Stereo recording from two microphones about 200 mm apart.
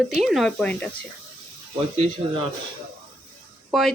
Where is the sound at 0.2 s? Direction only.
Centre (ahead or behind).